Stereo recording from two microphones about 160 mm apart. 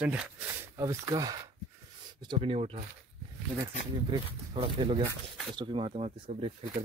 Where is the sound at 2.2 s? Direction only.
35° right (ahead or behind).